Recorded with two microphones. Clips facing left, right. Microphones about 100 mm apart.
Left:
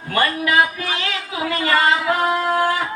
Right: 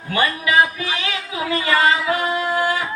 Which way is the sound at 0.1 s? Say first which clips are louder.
Left 1 dB; 50° left (ahead or behind).